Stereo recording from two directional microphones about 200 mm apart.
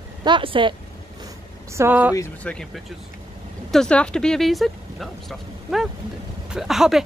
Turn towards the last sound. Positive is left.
turn(degrees=0)  # may be behind; listen again after turning